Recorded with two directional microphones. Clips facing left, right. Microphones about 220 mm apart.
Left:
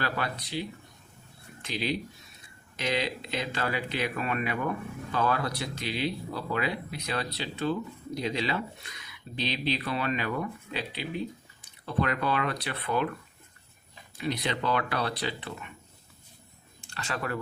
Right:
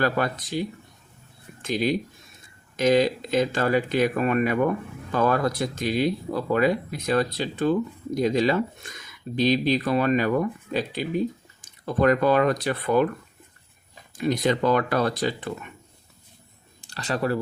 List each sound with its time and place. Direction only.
0.0 s speech: 45° right (ahead or behind)
14.2 s speech: 45° right (ahead or behind)
16.8 s speech: 35° right (ahead or behind)